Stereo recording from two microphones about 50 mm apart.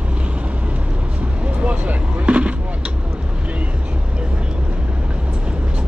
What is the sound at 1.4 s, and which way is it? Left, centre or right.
Vehicle, right.